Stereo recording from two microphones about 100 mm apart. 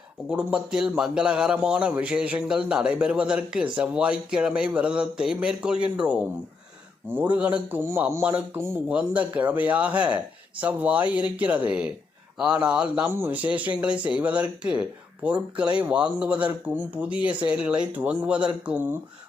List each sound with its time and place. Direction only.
0.3 s speech: 10° right (ahead or behind)
13.1 s speech: 20° right (ahead or behind)